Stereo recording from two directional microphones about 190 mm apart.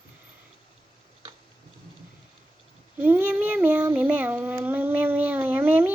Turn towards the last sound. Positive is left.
turn(degrees=-10)  # may be behind; listen again after turning